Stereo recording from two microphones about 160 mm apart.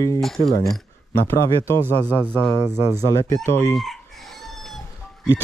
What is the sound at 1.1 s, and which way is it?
Speech, 15° left (ahead or behind).